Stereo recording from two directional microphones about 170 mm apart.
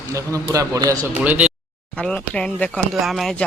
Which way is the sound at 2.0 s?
5° left (ahead or behind).